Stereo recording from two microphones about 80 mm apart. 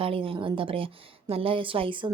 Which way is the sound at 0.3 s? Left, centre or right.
Right.